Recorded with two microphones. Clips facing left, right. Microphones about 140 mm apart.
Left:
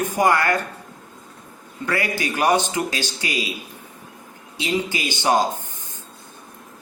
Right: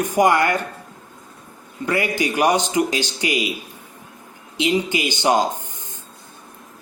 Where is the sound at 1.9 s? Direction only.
20° right (ahead or behind).